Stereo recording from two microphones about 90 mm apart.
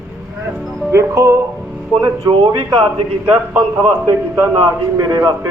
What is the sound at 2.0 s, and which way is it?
Speech, 45° right (ahead or behind).